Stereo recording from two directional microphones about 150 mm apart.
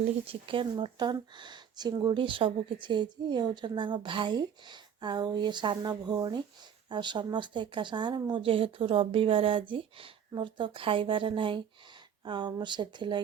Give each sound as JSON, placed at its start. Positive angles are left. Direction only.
{"t": 0.3, "sound": "speech", "side_deg": -35}